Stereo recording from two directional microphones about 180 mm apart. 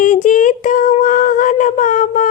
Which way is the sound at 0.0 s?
45° left (ahead or behind).